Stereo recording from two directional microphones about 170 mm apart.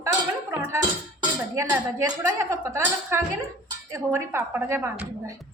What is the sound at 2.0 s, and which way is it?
Speech, 20° right (ahead or behind).